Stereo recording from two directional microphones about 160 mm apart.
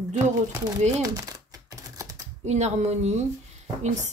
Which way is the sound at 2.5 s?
45° right (ahead or behind).